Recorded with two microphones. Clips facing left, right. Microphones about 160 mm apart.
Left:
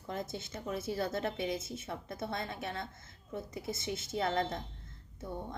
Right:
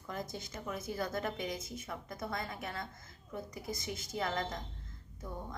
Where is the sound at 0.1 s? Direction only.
25° left (ahead or behind).